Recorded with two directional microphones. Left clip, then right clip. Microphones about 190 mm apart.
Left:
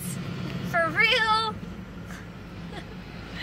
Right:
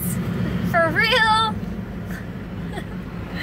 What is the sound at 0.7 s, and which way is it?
Speech, 15° left (ahead or behind).